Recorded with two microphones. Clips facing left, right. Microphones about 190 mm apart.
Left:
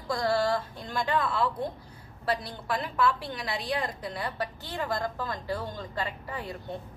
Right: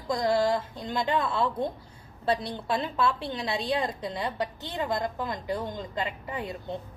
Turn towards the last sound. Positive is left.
turn(degrees=-20)  # may be behind; listen again after turning